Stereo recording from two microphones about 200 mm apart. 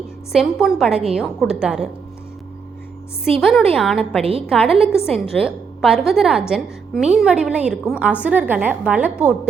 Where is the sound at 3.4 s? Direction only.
Centre (ahead or behind).